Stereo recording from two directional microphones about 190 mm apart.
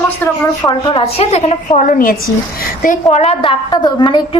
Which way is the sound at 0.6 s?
25° left (ahead or behind).